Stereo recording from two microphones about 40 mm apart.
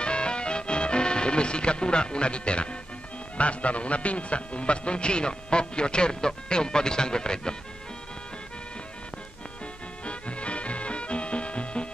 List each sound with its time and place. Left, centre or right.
0.0 s music: left
3.3 s a man's voice: left
10.0 s music: left